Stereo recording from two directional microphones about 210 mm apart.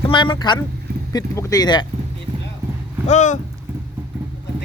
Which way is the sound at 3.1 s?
35° left (ahead or behind).